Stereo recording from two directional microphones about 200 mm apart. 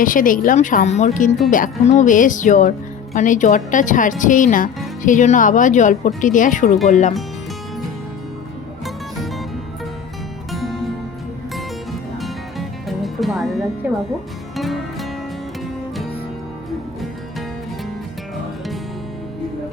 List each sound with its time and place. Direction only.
0.0 s speech: 45° left (ahead or behind)
10.5 s music: centre (ahead or behind)
12.2 s music: centre (ahead or behind)